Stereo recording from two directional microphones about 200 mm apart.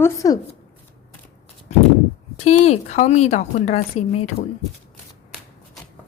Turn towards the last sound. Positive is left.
turn(degrees=30)  # may be behind; listen again after turning